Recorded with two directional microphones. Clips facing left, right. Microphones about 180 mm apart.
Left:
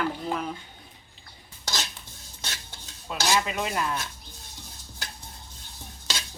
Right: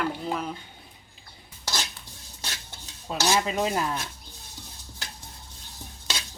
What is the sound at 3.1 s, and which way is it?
Dishes, 35° right (ahead or behind).